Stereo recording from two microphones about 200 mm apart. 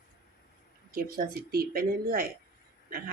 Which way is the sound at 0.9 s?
45° right (ahead or behind).